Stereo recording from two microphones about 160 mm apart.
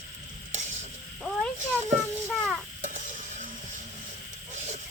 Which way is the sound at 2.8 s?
50° right (ahead or behind).